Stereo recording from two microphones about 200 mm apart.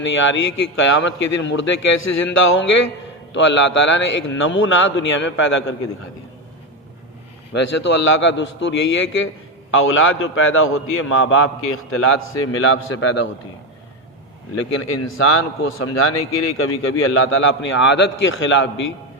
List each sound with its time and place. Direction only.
0.0 s a man's voice: 70° left (ahead or behind)
3.3 s a man's voice: 65° left (ahead or behind)
8.0 s a man's voice: 75° left (ahead or behind)
14.8 s a man's voice: 90° left; by 18.9 s 70° left (ahead or behind)